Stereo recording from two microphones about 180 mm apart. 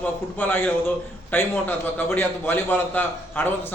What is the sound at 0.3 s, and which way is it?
A man's voice, 10° left (ahead or behind).